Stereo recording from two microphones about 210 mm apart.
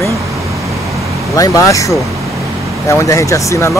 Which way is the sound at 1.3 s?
15° left (ahead or behind).